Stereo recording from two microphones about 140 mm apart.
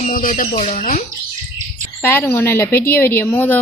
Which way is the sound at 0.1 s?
80° left.